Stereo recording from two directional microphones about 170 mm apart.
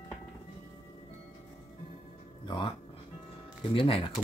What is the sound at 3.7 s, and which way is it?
Speech, 35° left (ahead or behind).